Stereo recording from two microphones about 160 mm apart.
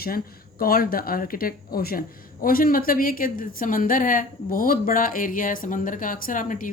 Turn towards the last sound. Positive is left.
turn(degrees=60)  # may be behind; listen again after turning